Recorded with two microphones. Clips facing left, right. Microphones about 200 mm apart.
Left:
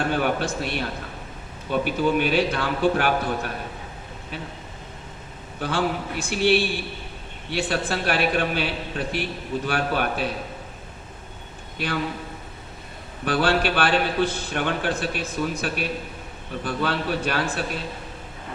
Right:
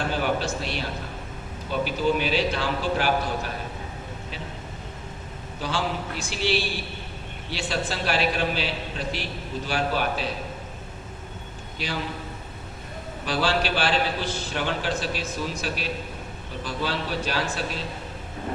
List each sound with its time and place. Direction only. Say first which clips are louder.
0.0 s a man's voice: left 2 dB; 55° left (ahead or behind)
5.5 s a man's voice: left 3 dB; 55° left (ahead or behind)
11.8 s a man's voice: left 4 dB; 55° left (ahead or behind)
13.2 s a man's voice: left 3 dB; 55° left (ahead or behind)